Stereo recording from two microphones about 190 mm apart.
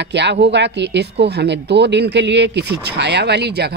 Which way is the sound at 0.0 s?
65° right (ahead or behind).